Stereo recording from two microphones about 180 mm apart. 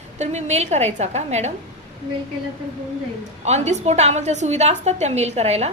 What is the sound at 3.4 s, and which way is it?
A woman's voice, 40° right (ahead or behind).